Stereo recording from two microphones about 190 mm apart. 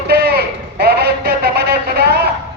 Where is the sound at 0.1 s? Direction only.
55° right (ahead or behind).